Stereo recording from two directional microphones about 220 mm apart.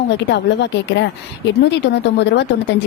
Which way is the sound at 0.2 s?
50° left (ahead or behind).